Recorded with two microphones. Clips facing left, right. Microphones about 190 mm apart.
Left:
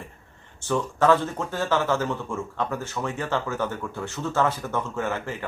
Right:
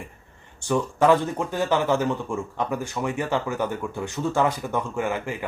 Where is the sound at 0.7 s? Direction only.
15° right (ahead or behind).